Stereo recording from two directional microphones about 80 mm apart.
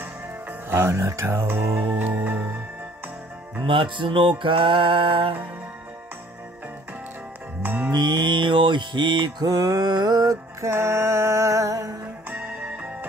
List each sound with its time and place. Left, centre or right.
0.0 s music: right
3.6 s music: right
7.6 s music: right
7.9 s mantra: right
12.3 s music: right